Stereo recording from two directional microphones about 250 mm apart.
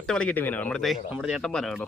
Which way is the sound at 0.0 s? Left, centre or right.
Centre.